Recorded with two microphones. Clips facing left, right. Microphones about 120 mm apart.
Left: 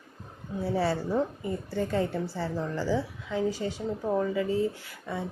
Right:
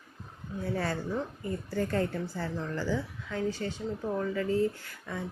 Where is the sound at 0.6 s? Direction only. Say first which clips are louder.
Left 5 dB; 5° left (ahead or behind).